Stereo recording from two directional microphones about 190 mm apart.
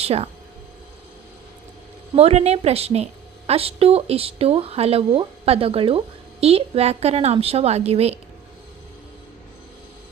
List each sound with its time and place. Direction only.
0.0 s speech: 35° right (ahead or behind)
2.1 s a woman's voice: 35° right (ahead or behind)